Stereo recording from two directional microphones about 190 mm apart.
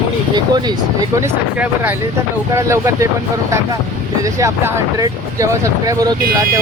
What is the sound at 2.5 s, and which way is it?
Speech, 15° right (ahead or behind).